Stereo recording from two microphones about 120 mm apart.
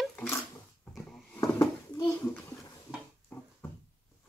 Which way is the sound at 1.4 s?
30° left (ahead or behind).